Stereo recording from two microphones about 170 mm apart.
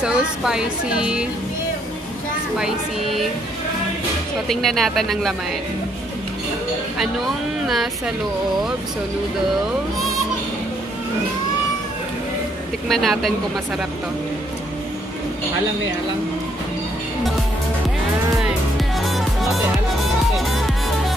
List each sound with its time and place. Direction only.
0.0 s speech: 5° right (ahead or behind)
2.5 s speech: centre (ahead or behind)
4.5 s speech: centre (ahead or behind)
7.6 s speech: centre (ahead or behind)
9.9 s music: centre (ahead or behind)
12.8 s speech: centre (ahead or behind)
18.9 s music: centre (ahead or behind)